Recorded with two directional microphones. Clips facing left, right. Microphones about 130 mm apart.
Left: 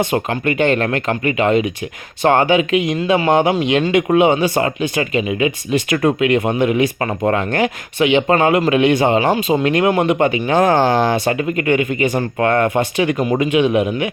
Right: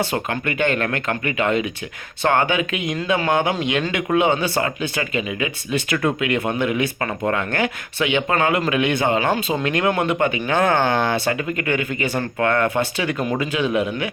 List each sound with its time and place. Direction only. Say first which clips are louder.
0.0 s speech: left 5 dB; 20° left (ahead or behind)